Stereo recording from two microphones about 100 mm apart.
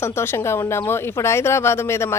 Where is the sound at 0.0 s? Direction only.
25° left (ahead or behind).